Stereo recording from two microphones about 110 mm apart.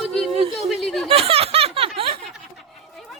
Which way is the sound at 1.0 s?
60° right (ahead or behind).